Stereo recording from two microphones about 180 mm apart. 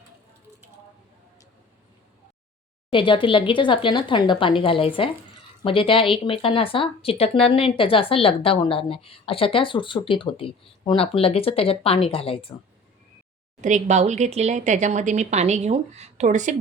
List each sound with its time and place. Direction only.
2.9 s a woman's voice: 30° left (ahead or behind)
13.6 s speech: 40° right (ahead or behind)